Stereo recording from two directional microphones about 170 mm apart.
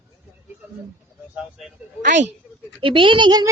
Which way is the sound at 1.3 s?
5° right (ahead or behind).